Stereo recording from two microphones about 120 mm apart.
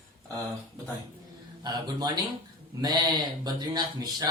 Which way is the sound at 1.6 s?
35° right (ahead or behind).